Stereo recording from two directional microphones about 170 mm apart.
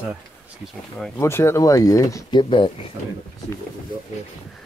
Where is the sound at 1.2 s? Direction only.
15° left (ahead or behind).